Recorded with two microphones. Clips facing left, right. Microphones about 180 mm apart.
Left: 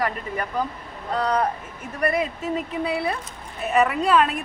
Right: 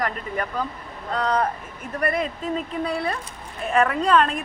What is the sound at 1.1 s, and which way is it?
A woman's voice, 10° left (ahead or behind).